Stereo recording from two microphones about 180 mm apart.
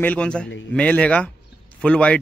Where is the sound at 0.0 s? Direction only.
10° left (ahead or behind).